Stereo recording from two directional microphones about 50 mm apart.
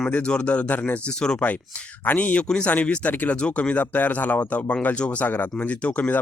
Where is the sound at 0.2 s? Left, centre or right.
Left.